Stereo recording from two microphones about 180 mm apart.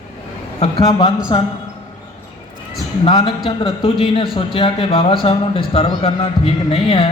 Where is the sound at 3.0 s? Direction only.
25° left (ahead or behind).